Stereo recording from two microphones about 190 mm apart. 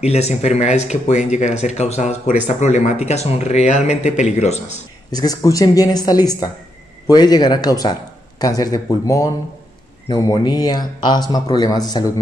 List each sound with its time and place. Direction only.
0.0 s speech: 35° left (ahead or behind)
5.1 s speech: 20° left (ahead or behind)